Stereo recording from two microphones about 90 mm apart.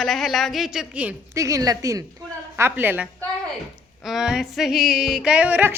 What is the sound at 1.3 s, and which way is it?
Snicker, 40° right (ahead or behind).